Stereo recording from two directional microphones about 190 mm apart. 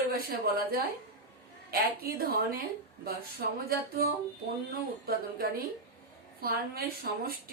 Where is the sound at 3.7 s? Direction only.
50° right (ahead or behind).